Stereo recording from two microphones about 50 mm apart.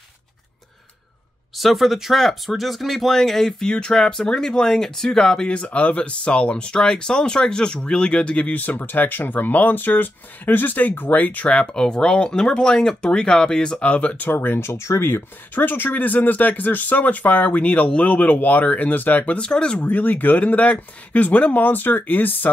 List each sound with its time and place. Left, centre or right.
1.6 s speech: centre
5.5 s speech: left
8.5 s speech: left
11.6 s speech: centre; by 14.3 s left
14.3 s speech: left
14.7 s speech: left
15.0 s speech: left
19.3 s speech: centre
19.8 s speech: left